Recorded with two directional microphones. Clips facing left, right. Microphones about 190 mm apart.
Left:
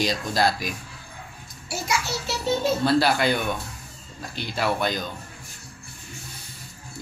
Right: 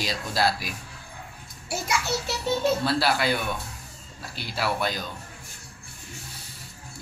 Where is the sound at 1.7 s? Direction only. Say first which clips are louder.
Even; 55° right (ahead or behind).